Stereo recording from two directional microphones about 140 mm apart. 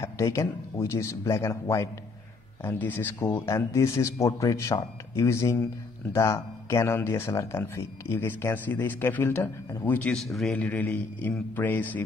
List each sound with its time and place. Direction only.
0.0 s speech: 20° left (ahead or behind)